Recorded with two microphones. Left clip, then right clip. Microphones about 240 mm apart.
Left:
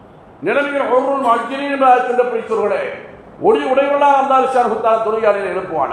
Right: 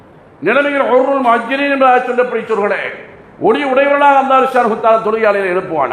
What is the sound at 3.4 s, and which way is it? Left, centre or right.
A man's voice, right.